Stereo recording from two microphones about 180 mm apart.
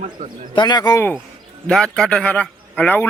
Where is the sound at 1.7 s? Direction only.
5° left (ahead or behind).